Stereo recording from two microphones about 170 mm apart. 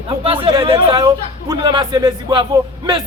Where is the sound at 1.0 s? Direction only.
20° right (ahead or behind).